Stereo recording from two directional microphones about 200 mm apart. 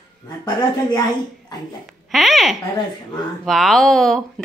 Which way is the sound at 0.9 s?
20° left (ahead or behind).